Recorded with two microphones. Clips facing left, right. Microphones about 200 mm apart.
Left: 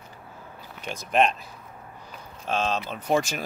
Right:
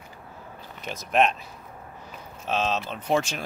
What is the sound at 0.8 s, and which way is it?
Speech, centre (ahead or behind).